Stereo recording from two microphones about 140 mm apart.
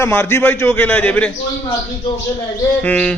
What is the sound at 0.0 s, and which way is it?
A man's voice, 15° left (ahead or behind).